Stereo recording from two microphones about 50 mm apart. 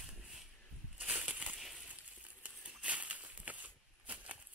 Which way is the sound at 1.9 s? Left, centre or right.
Right.